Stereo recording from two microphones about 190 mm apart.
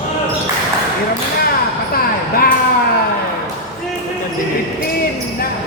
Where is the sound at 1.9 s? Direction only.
50° left (ahead or behind).